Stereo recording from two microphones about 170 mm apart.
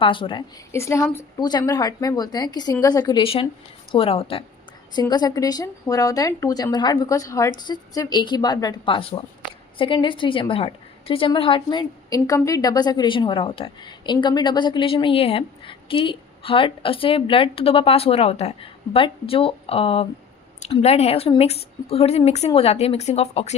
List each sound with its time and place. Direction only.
0.0 s a woman's voice: 30° left (ahead or behind)
0.7 s a woman's voice: 15° left (ahead or behind); by 23.6 s 35° left (ahead or behind)